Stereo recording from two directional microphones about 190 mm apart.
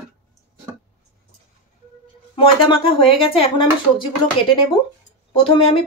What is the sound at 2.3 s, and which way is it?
Speech, 30° left (ahead or behind).